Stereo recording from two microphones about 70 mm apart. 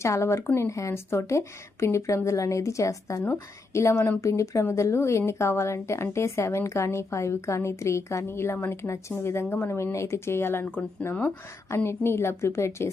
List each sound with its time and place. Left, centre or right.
0.0 s a woman's voice: left